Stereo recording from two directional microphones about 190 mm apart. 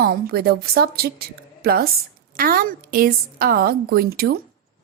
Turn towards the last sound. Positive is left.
turn(degrees=-50)  # may be behind; listen again after turning